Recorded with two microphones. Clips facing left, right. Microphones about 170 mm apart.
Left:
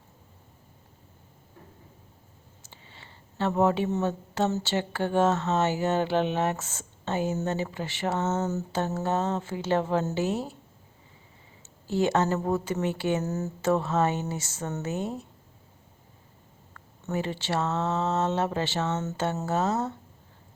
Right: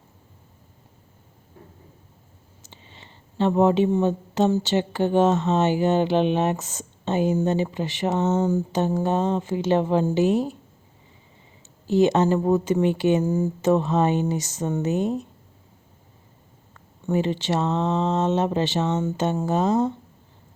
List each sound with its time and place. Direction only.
2.6 s speech: 20° right (ahead or behind)
11.9 s speech: 20° right (ahead or behind)
16.7 s speech: 20° right (ahead or behind)